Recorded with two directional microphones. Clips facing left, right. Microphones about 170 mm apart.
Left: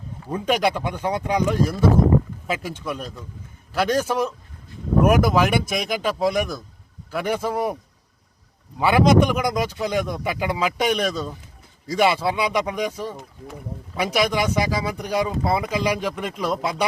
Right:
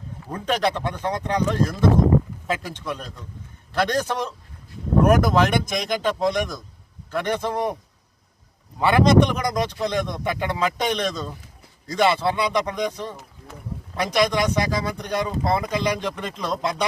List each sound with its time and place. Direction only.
0.3 s speech: 10° left (ahead or behind)
8.8 s speech: 5° left (ahead or behind)